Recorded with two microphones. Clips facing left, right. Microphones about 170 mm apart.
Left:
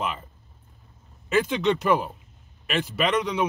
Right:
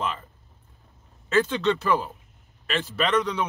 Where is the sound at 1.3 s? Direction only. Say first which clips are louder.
Even; 15° left (ahead or behind).